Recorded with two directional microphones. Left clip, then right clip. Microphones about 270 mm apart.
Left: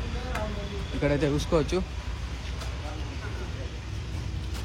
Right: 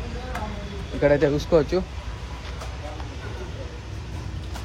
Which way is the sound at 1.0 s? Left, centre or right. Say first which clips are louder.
Right 7 dB; centre.